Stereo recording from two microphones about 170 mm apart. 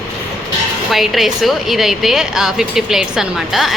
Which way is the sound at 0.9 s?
Centre (ahead or behind).